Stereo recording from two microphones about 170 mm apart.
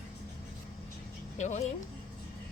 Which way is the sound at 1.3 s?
45° left (ahead or behind).